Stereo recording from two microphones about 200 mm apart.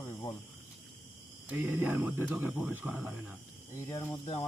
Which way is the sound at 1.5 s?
10° right (ahead or behind).